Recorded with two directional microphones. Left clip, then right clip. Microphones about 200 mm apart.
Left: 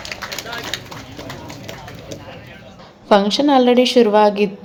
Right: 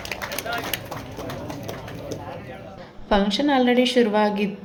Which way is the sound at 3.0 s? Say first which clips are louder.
Left 7 dB; 25° left (ahead or behind).